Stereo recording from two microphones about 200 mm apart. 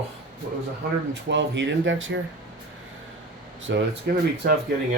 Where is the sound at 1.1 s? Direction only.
65° right (ahead or behind).